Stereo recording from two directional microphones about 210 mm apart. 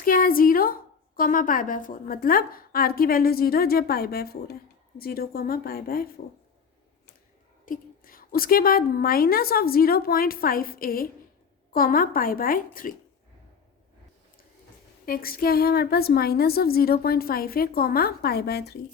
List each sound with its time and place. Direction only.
0.0 s a woman's voice: 40° left (ahead or behind)
7.6 s a woman's voice: 40° left (ahead or behind)
15.0 s a woman's voice: 45° left (ahead or behind)